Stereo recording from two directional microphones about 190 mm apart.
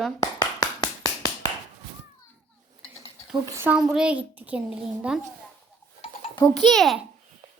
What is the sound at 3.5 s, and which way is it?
A child's voice, 10° right (ahead or behind).